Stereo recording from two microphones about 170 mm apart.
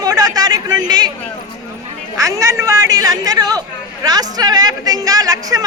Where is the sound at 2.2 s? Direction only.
20° right (ahead or behind).